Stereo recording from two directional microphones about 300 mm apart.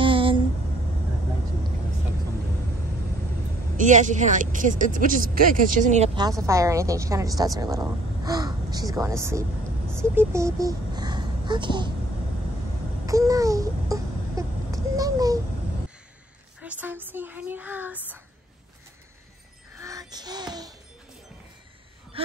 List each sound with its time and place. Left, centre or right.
0.0 s a sound: centre
3.7 s speech: right
13.0 s a sound: centre
16.6 s speech: centre
19.8 s music: centre
22.1 s gasp: centre